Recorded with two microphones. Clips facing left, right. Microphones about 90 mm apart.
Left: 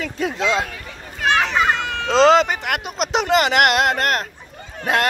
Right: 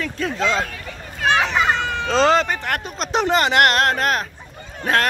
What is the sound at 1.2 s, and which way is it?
Children playing, 10° right (ahead or behind).